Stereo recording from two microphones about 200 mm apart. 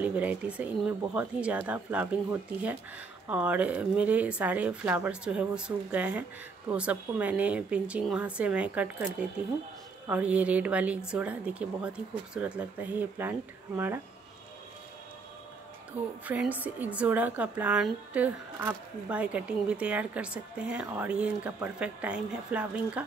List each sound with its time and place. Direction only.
0.0 s a woman's voice: 10° right (ahead or behind)
3.3 s a woman's voice: 5° right (ahead or behind)
10.0 s a woman's voice: 5° right (ahead or behind)
16.3 s a woman's voice: 10° right (ahead or behind)